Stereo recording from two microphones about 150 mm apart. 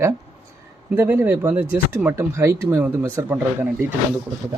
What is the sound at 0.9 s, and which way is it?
Speech, 15° right (ahead or behind).